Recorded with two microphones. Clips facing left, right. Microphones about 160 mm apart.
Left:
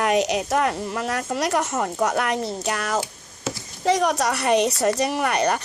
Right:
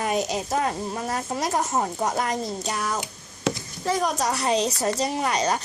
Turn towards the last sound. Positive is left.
turn(degrees=60)  # may be behind; listen again after turning